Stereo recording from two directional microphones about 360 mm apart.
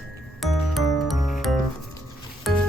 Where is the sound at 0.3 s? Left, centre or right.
Centre.